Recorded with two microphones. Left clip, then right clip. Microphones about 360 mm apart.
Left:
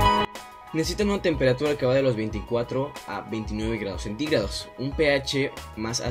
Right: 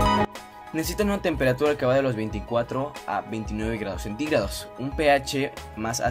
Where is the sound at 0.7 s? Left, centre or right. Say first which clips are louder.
Left 1 dB; centre.